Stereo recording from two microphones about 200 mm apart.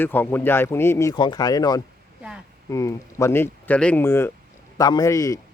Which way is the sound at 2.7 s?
15° left (ahead or behind).